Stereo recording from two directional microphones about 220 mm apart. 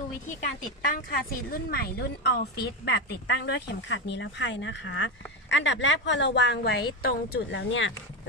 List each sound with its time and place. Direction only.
0.3 s speech: 35° left (ahead or behind); by 7.9 s 60° left (ahead or behind)